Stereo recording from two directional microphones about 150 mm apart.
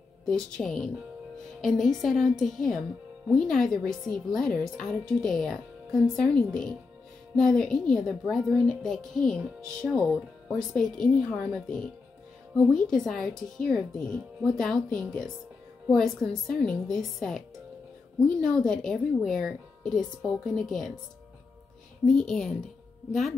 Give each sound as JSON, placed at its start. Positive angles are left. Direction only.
{"t": 0.2, "sound": "speech", "side_deg": 5}
{"t": 18.4, "sound": "speech", "side_deg": 5}
{"t": 22.0, "sound": "speech", "side_deg": 5}